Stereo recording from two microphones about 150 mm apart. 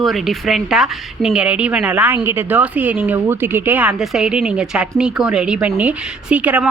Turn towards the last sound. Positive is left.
turn(degrees=-10)  # may be behind; listen again after turning